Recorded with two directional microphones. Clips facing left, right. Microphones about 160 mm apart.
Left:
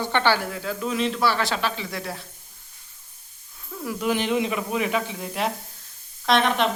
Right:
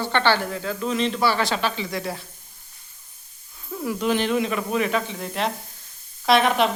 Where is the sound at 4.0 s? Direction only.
10° left (ahead or behind).